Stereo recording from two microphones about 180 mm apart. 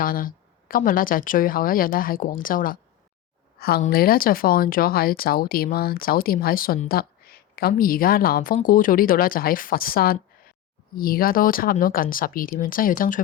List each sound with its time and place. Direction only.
0.0 s a woman's voice: 50° left (ahead or behind)